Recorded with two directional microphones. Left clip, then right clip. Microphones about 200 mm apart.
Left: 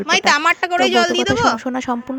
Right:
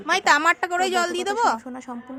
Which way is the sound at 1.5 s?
35° left (ahead or behind).